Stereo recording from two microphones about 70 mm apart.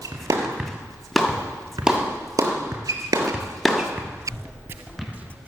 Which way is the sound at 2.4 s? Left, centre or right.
Right.